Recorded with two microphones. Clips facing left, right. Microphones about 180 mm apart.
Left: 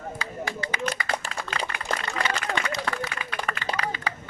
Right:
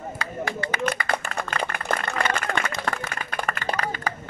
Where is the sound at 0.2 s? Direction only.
55° right (ahead or behind).